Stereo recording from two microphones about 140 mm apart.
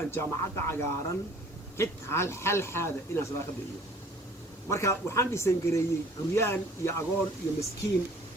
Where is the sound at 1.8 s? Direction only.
20° left (ahead or behind).